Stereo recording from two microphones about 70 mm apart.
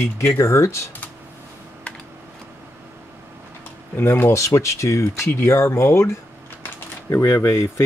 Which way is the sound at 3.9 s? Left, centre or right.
Left.